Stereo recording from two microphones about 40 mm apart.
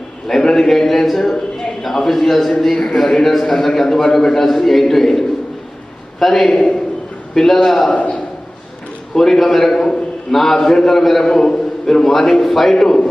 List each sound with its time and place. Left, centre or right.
0.3 s a man's voice: centre
7.9 s a man's voice: left
9.1 s a man's voice: centre